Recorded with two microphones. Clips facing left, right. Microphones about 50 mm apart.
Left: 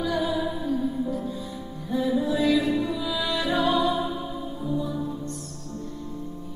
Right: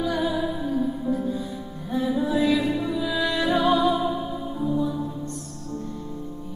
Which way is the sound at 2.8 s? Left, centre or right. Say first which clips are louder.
Right 2 dB; centre.